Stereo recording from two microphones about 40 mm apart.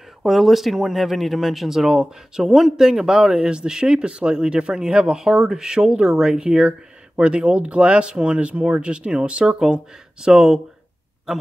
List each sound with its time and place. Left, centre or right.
0.2 s speech: centre; by 9.5 s right
9.5 s speech: centre